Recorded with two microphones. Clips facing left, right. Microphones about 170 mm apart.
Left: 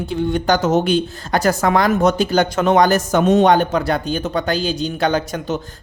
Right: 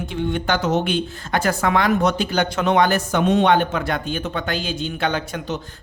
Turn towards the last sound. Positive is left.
turn(degrees=40)  # may be behind; listen again after turning